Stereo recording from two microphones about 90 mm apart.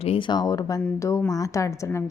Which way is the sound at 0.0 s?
80° left.